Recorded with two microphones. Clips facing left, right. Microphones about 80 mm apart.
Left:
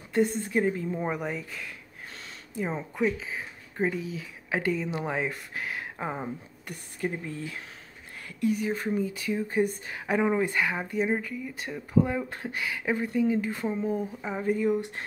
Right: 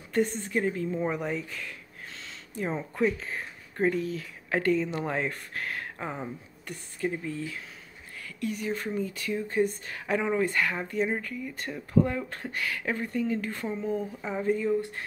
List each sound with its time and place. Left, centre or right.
0.1 s a woman's voice: centre
0.5 s speech: centre
8.6 s speech: centre